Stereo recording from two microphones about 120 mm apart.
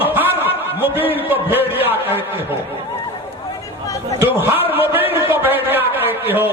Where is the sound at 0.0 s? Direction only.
15° right (ahead or behind).